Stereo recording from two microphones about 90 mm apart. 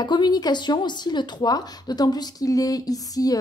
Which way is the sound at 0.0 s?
55° left (ahead or behind).